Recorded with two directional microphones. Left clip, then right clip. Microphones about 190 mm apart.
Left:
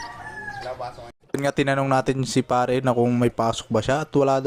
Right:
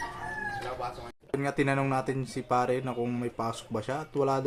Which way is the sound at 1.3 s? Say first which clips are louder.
Left 6 dB; 45° left (ahead or behind).